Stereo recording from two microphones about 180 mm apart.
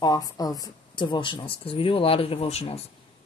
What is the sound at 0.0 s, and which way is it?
Speech, 20° left (ahead or behind).